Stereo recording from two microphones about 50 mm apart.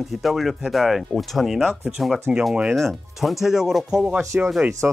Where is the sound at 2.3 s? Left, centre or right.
Right.